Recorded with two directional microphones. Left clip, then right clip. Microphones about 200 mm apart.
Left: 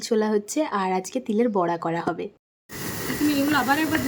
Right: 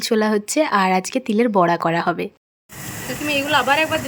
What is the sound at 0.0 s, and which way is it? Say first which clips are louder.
Speech: right 4 dB; 15° right (ahead or behind).